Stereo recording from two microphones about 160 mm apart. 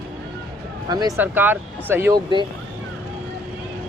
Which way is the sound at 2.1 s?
30° right (ahead or behind).